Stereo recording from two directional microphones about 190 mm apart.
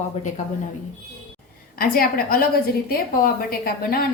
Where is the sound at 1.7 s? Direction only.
50° left (ahead or behind).